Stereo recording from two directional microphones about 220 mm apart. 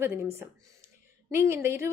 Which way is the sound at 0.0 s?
10° right (ahead or behind).